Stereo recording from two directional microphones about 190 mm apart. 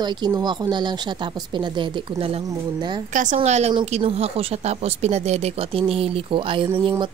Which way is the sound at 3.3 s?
35° right (ahead or behind).